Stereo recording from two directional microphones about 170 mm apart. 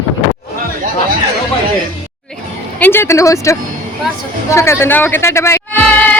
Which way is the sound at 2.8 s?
15° left (ahead or behind).